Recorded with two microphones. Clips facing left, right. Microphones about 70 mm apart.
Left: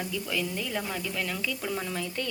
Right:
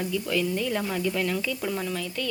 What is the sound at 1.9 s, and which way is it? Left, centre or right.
Speech, left.